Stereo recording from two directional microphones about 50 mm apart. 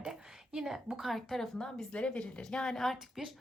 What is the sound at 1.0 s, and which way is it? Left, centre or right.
Speech, centre.